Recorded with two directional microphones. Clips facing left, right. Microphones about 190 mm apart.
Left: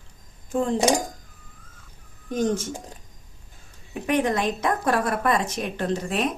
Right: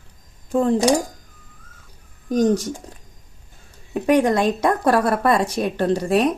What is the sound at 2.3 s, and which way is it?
Speech, 40° right (ahead or behind).